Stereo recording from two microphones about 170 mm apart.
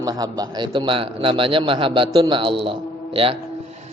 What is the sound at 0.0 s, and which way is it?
A man's voice, 20° right (ahead or behind).